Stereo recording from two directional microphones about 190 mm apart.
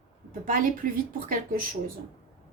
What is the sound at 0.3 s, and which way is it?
A woman's voice, 45° right (ahead or behind).